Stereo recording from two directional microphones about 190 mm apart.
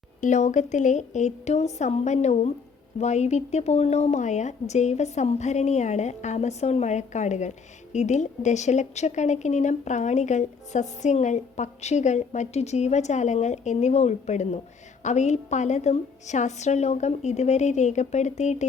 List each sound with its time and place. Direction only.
0.2 s speech: 40° left (ahead or behind)